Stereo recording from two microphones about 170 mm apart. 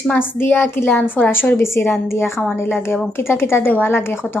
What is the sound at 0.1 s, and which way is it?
Speech, 10° left (ahead or behind).